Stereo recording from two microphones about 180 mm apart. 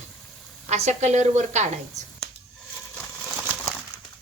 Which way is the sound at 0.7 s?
40° right (ahead or behind).